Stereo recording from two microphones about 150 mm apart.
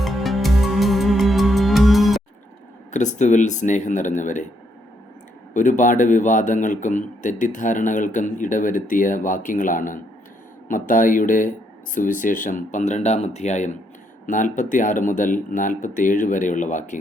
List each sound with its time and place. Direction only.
0.0 s music: centre (ahead or behind)
2.9 s a man's voice: 55° left (ahead or behind)
5.5 s a man's voice: 60° left (ahead or behind)